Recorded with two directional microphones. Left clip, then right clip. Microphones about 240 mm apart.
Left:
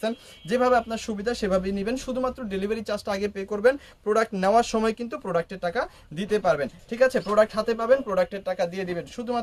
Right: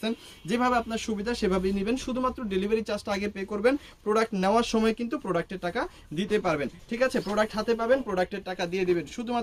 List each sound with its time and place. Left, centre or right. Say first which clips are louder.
0.0 s speech: left 4 dB; centre